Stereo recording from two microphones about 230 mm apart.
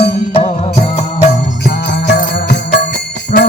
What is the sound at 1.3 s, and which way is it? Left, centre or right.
Jingle bell, left.